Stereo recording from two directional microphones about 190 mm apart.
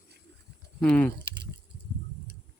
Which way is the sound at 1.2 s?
65° right (ahead or behind).